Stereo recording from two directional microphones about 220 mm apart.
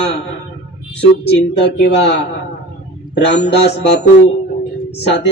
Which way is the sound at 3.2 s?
50° left (ahead or behind).